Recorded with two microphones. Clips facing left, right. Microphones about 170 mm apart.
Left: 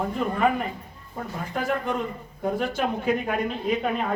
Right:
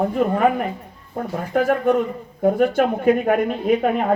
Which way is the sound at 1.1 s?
55° right (ahead or behind).